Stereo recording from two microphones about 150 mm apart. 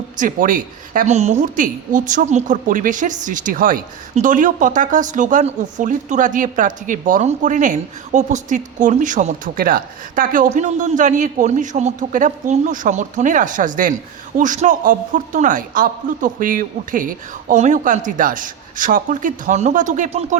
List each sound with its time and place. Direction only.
0.2 s speech: 60° right (ahead or behind)